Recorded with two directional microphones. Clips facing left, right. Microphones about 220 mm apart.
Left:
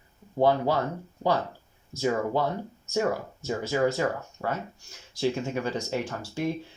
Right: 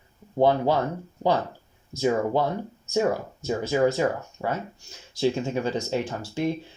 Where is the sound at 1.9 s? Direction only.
20° right (ahead or behind).